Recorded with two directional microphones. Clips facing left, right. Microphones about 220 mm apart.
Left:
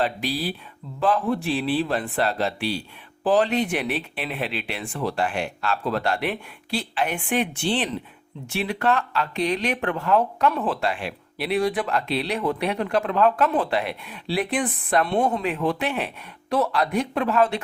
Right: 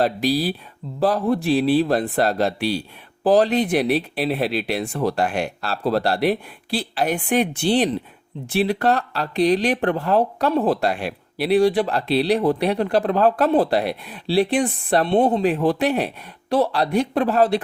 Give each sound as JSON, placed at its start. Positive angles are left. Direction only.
{"t": 0.0, "sound": "speech", "side_deg": -40}